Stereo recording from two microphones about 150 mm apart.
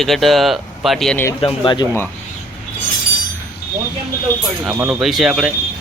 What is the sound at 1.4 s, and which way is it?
Speech, 35° left (ahead or behind).